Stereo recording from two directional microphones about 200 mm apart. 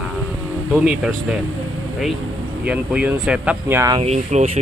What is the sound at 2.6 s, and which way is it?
Speech, 5° right (ahead or behind).